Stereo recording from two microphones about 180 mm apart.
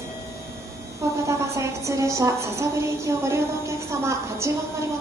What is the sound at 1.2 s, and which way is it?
A woman's voice, 15° right (ahead or behind).